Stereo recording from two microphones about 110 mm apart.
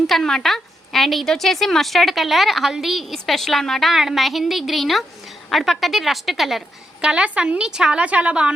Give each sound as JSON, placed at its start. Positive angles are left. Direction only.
{"t": 0.1, "sound": "a woman's voice", "side_deg": 5}